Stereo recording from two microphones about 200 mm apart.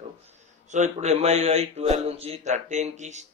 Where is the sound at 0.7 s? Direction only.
35° right (ahead or behind).